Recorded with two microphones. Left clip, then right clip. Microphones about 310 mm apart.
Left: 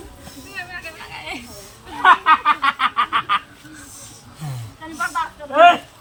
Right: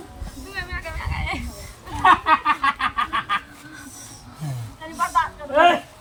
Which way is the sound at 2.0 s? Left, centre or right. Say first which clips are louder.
Left 3 dB; centre.